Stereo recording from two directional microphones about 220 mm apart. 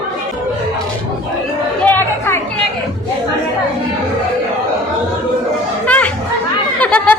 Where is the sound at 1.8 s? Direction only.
10° left (ahead or behind).